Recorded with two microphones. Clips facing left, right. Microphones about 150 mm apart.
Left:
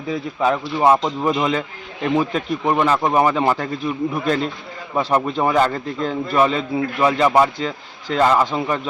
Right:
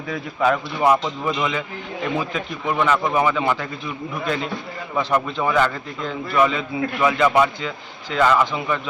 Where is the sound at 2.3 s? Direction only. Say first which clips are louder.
Left 5 dB; 40° left (ahead or behind).